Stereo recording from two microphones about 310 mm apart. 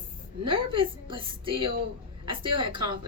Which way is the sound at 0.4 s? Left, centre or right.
Centre.